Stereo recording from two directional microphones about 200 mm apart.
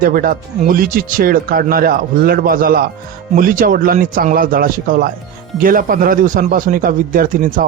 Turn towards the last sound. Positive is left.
turn(degrees=-45)  # may be behind; listen again after turning